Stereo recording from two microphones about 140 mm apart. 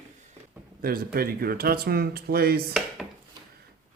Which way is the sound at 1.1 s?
90° right.